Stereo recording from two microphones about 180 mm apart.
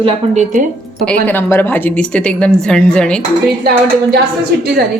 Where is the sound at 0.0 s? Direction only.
40° right (ahead or behind).